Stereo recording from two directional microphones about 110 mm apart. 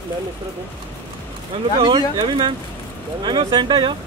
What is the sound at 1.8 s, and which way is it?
Speech, 45° right (ahead or behind).